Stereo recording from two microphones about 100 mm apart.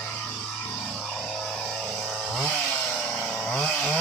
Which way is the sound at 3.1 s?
5° left (ahead or behind).